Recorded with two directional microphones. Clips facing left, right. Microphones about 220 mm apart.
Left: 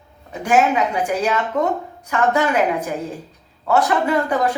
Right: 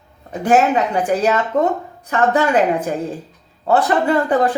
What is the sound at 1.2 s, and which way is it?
Speech, 35° right (ahead or behind).